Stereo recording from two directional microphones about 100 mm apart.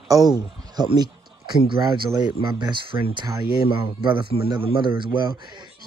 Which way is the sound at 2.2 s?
50° right (ahead or behind).